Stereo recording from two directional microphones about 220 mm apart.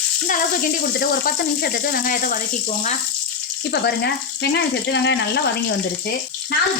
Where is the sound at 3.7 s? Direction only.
50° left (ahead or behind).